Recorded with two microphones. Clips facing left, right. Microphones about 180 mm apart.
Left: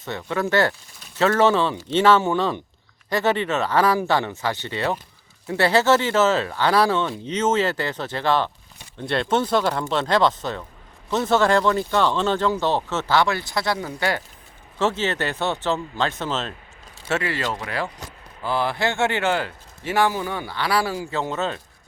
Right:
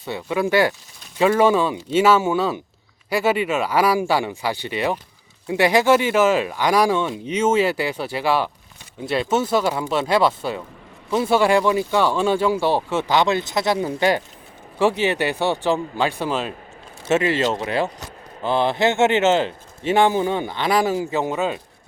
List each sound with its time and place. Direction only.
0.0 s a man's voice: 10° right (ahead or behind)